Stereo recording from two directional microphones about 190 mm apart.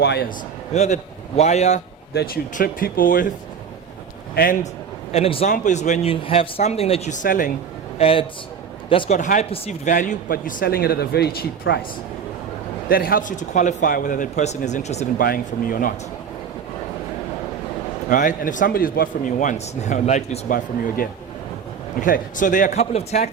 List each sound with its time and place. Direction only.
0.0 s speech: 60° left (ahead or behind)
0.7 s speech: 35° left (ahead or behind)
2.1 s a man's voice: 50° left (ahead or behind)
5.1 s speech: 30° left (ahead or behind)
7.9 s a man's voice: 30° left (ahead or behind); by 11.4 s 55° left (ahead or behind)
11.7 s speech: 80° left
12.9 s speech: 50° left (ahead or behind)
15.2 s a man's voice: 50° left (ahead or behind)
18.1 s a man's voice: 45° left (ahead or behind)